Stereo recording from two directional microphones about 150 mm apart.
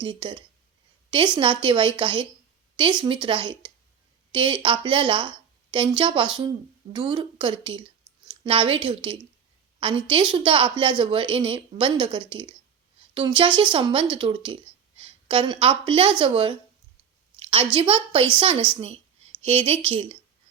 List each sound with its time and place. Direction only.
0.0 s a woman's voice: 35° right (ahead or behind)
17.4 s a sound: 35° right (ahead or behind)
17.7 s a woman's voice: 35° right (ahead or behind)